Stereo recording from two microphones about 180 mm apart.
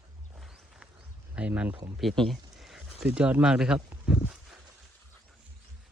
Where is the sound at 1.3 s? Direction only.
5° right (ahead or behind).